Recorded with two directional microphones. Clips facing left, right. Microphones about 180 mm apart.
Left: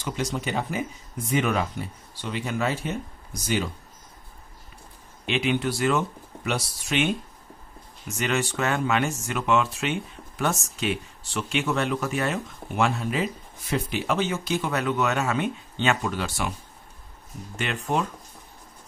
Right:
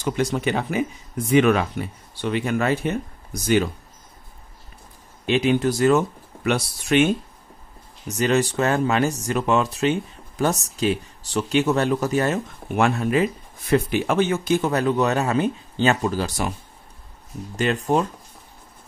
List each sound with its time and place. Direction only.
0.0 s speech: 55° right (ahead or behind)
5.2 s speech: 40° right (ahead or behind)
6.4 s speech: 60° right (ahead or behind)
8.1 s speech: 35° right (ahead or behind)
12.7 s speech: 55° right (ahead or behind); by 16.5 s 35° right (ahead or behind)
17.6 s speech: 35° right (ahead or behind)